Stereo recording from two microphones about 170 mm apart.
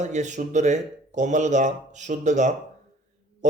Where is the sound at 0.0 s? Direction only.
45° right (ahead or behind).